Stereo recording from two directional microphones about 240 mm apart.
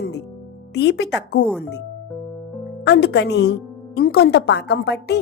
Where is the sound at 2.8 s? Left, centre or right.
Left.